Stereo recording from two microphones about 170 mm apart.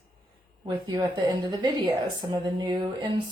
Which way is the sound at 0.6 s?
25° right (ahead or behind).